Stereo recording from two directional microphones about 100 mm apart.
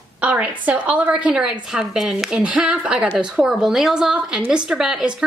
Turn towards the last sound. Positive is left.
turn(degrees=-5)  # may be behind; listen again after turning